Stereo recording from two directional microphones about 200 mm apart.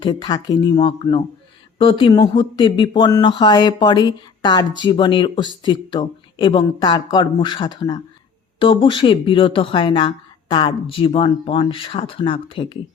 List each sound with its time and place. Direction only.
0.0 s speech: 25° left (ahead or behind)